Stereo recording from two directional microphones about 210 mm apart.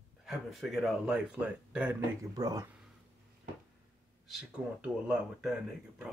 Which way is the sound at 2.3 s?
15° right (ahead or behind).